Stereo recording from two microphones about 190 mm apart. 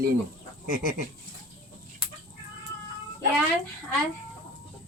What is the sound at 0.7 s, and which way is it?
Goat, 45° right (ahead or behind).